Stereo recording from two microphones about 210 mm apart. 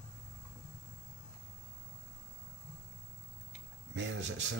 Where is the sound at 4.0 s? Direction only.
60° right (ahead or behind).